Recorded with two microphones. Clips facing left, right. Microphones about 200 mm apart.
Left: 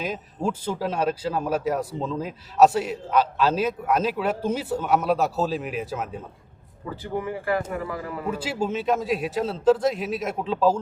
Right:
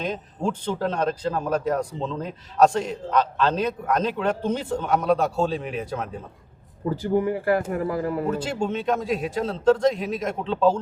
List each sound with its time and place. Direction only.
0.0 s speech: 5° left (ahead or behind)
6.8 s a man's voice: 40° right (ahead or behind)
8.3 s a man's voice: 5° left (ahead or behind)